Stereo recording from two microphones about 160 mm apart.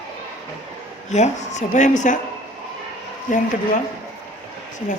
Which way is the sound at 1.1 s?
45° left (ahead or behind).